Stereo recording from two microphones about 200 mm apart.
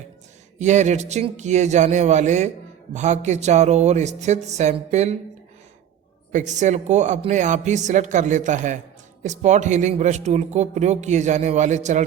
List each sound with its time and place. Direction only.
0.6 s a man's voice: 35° right (ahead or behind)
6.3 s a man's voice: 35° right (ahead or behind)